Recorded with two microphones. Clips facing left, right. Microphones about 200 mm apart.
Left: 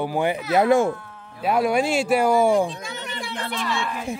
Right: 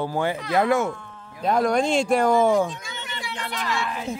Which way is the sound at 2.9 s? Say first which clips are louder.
Left 3 dB; 35° left (ahead or behind).